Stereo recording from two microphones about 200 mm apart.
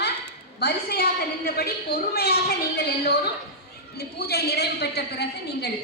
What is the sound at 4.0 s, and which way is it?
A woman's voice, 50° left (ahead or behind).